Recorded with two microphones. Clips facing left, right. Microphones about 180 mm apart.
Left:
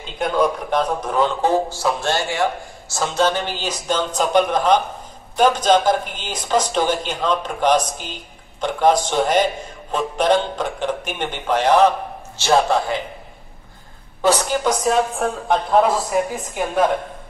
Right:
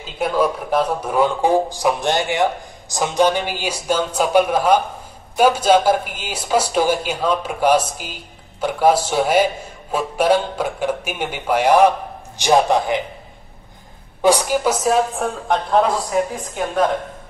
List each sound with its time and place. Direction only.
0.0 s speech: 5° right (ahead or behind)
14.2 s a woman's voice: 10° right (ahead or behind)